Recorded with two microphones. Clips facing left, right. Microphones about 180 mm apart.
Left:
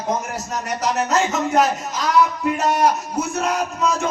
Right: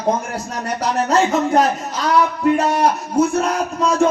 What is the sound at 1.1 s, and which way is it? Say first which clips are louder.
Speech: right 6 dB; 35° right (ahead or behind).